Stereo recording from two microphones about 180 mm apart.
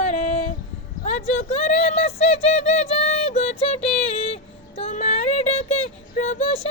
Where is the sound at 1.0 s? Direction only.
40° left (ahead or behind).